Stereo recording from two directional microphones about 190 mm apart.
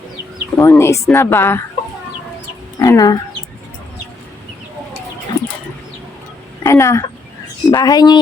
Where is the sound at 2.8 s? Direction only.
20° left (ahead or behind).